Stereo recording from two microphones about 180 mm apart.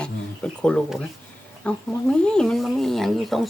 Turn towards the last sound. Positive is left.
turn(degrees=0)  # may be behind; listen again after turning